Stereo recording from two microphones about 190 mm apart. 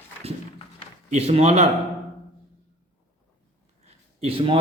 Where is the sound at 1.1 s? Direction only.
35° right (ahead or behind).